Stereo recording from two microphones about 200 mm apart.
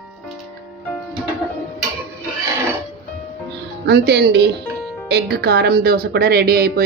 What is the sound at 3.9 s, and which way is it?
A woman's voice, 55° right (ahead or behind).